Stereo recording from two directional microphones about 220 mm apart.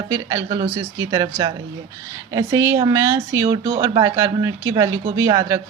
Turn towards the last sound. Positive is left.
turn(degrees=-15)  # may be behind; listen again after turning